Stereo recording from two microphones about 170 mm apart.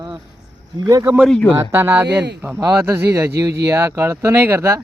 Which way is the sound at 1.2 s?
5° left (ahead or behind).